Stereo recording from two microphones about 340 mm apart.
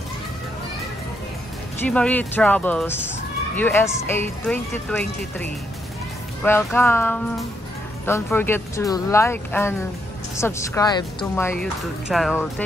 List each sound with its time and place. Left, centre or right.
1.9 s speech: centre